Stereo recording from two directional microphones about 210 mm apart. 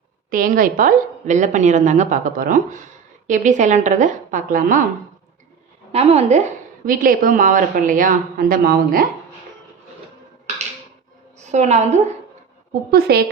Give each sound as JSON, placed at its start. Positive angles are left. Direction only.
{"t": 0.3, "sound": "a woman's voice", "side_deg": -40}
{"t": 5.9, "sound": "a woman's voice", "side_deg": -30}
{"t": 6.8, "sound": "a woman's voice", "side_deg": -40}
{"t": 11.3, "sound": "a woman's voice", "side_deg": -35}
{"t": 12.9, "sound": "a woman's voice", "side_deg": -50}